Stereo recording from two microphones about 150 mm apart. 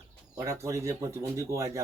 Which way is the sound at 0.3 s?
20° right (ahead or behind).